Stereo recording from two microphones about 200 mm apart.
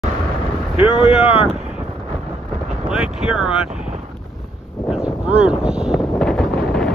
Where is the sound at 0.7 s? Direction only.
30° left (ahead or behind).